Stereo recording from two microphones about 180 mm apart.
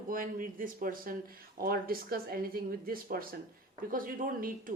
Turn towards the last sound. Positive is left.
turn(degrees=-50)  # may be behind; listen again after turning